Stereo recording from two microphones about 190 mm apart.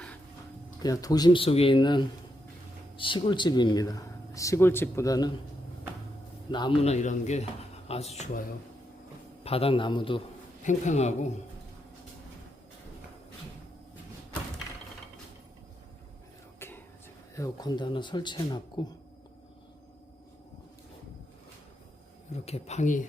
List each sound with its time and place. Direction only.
0.8 s speech: 20° left (ahead or behind)
6.5 s speech: 25° left (ahead or behind)
9.4 s speech: 30° left (ahead or behind)
10.6 s speech: 40° left (ahead or behind)
16.6 s a sound: 10° left (ahead or behind)
17.3 s speech: 20° left (ahead or behind)
22.3 s speech: 35° left (ahead or behind)